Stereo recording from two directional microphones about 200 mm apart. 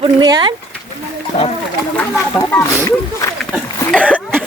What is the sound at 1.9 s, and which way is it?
Speech, 10° left (ahead or behind).